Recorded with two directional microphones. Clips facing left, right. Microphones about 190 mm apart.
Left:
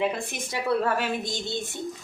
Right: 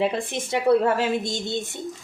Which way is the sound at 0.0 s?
25° right (ahead or behind).